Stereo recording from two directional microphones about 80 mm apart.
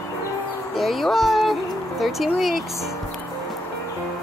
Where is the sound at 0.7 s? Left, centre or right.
Centre.